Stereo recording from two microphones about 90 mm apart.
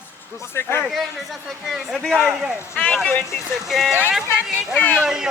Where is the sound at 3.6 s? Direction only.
Centre (ahead or behind).